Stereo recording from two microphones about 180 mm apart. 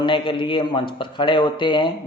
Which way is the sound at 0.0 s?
25° left (ahead or behind).